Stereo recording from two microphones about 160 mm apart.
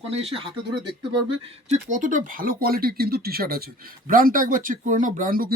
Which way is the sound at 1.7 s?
50° right (ahead or behind).